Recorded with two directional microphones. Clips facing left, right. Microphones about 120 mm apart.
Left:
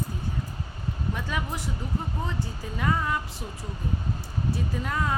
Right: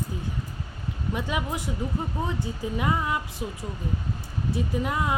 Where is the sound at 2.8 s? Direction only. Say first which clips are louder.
Even; 15° right (ahead or behind).